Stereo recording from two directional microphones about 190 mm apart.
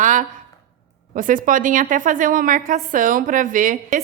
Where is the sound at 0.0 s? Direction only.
40° right (ahead or behind).